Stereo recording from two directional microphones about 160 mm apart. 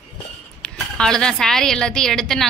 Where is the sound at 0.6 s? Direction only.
5° left (ahead or behind).